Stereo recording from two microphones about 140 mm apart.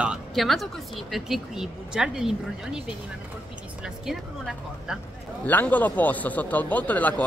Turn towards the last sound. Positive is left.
turn(degrees=10)  # may be behind; listen again after turning